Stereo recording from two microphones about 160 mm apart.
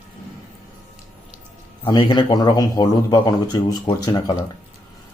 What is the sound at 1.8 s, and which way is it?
A man's voice, 30° left (ahead or behind).